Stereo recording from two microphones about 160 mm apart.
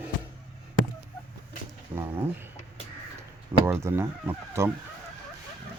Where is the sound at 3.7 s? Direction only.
15° right (ahead or behind).